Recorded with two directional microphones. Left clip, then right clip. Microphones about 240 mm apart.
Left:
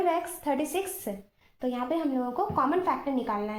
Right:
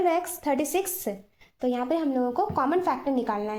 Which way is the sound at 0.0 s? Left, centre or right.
Right.